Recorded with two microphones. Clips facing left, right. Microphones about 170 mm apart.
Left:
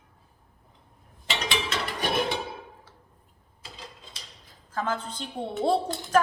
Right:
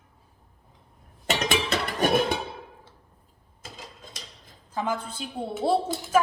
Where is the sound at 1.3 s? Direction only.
45° right (ahead or behind).